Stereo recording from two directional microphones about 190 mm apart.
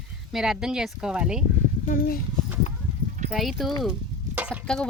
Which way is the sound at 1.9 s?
50° left (ahead or behind).